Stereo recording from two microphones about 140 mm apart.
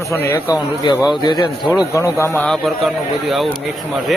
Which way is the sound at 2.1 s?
15° left (ahead or behind).